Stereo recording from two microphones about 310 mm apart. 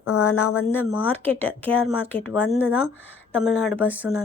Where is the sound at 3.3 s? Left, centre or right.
Centre.